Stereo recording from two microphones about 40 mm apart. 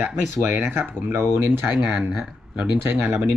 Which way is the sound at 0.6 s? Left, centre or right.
Right.